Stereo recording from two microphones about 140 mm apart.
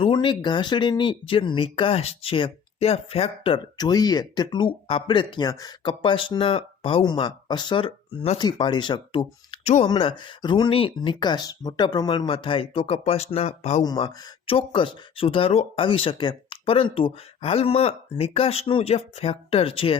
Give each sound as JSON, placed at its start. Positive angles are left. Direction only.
{"t": 0.0, "sound": "speech", "side_deg": 35}
{"t": 5.5, "sound": "speech", "side_deg": 25}
{"t": 5.8, "sound": "speech", "side_deg": 35}
{"t": 13.8, "sound": "speech", "side_deg": 30}